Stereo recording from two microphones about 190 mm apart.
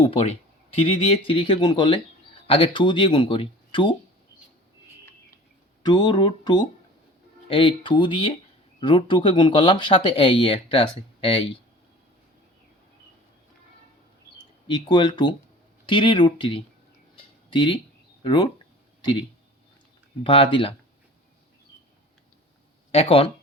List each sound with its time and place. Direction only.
0.0 s speech: 30° left (ahead or behind)
5.8 s speech: 25° left (ahead or behind)
14.7 s speech: 25° left (ahead or behind)
20.2 s speech: 30° left (ahead or behind)
22.9 s speech: 30° left (ahead or behind)